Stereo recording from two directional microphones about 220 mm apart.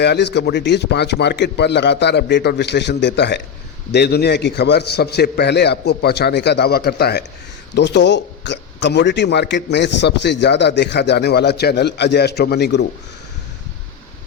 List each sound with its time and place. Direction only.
0.0 s a man's voice: 50° left (ahead or behind)